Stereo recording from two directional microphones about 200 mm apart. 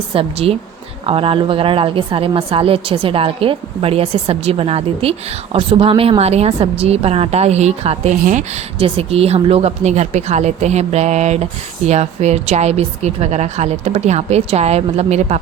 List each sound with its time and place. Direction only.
0.1 s a woman's voice: 30° right (ahead or behind)